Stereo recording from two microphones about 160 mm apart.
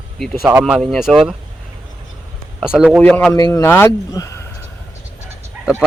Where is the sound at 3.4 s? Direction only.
20° left (ahead or behind).